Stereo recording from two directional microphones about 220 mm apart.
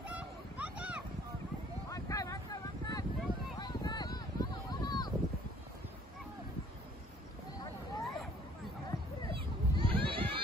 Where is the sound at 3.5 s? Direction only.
20° left (ahead or behind).